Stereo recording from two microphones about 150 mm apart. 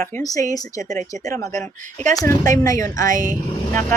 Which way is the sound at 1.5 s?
50° right (ahead or behind).